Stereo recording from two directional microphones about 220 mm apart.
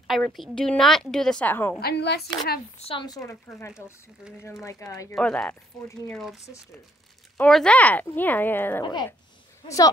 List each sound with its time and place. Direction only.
0.0 s a woman's voice: centre (ahead or behind)
1.8 s speech: 50° left (ahead or behind)
2.9 s a woman's voice: 20° left (ahead or behind)